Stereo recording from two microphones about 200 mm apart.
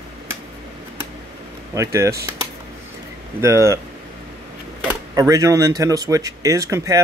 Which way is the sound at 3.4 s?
15° right (ahead or behind).